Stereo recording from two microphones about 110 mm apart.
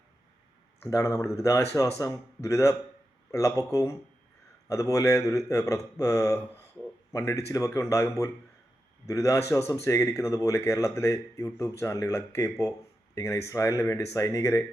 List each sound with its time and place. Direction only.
0.8 s speech: 30° left (ahead or behind)